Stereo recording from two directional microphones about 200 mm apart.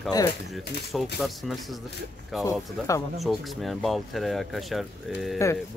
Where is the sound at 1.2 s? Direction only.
Centre (ahead or behind).